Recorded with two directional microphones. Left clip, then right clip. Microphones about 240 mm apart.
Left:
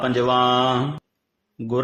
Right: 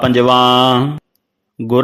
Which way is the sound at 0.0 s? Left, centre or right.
Right.